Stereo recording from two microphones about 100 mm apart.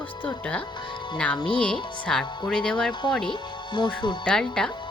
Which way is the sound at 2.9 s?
50° left (ahead or behind).